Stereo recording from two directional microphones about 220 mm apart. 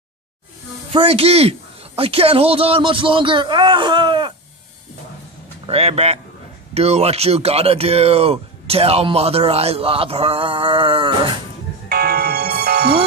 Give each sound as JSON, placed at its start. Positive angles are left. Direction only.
{"t": 0.9, "sound": "speech", "side_deg": -25}
{"t": 5.7, "sound": "speech", "side_deg": -30}
{"t": 11.9, "sound": "music", "side_deg": -45}